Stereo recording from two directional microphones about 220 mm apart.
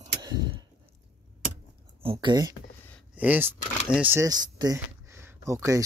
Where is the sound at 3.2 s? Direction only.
10° right (ahead or behind).